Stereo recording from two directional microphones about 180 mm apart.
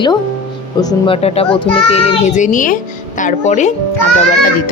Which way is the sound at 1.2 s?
30° left (ahead or behind).